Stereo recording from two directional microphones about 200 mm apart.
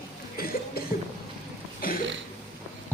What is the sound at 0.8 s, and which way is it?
Cough, 50° left (ahead or behind).